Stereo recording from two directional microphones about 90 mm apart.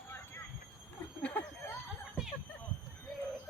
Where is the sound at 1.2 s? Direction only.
20° left (ahead or behind).